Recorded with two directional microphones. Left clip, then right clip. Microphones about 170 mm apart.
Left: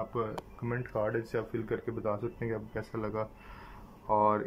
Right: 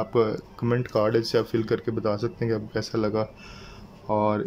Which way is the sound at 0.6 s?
15° right (ahead or behind).